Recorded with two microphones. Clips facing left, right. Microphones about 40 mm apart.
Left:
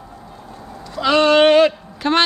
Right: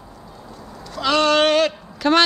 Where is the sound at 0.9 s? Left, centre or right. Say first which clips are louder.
Left 4 dB; centre.